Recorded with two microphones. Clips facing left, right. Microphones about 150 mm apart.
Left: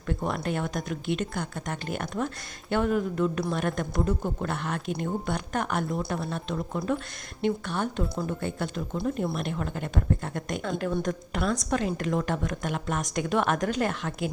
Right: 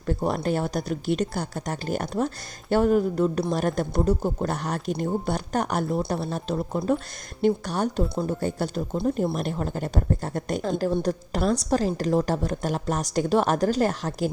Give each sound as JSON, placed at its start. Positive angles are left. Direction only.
{"t": 0.1, "sound": "speech", "side_deg": -35}